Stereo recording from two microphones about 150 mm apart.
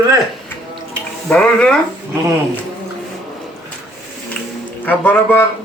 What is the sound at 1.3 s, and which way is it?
Speech, 10° left (ahead or behind).